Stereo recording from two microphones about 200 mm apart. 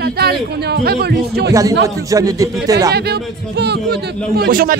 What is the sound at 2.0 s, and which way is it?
Speech, 15° right (ahead or behind).